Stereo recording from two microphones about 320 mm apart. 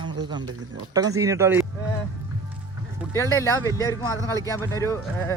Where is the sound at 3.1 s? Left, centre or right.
Centre.